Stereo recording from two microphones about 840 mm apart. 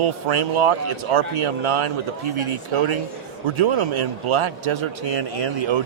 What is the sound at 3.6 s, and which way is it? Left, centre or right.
Speech, right.